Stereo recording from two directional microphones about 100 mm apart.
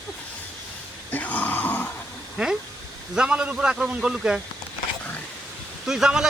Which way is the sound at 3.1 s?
10° right (ahead or behind).